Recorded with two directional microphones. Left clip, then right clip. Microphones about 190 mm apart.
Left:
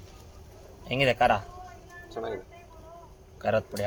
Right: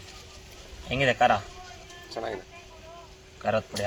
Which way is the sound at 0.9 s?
30° left (ahead or behind).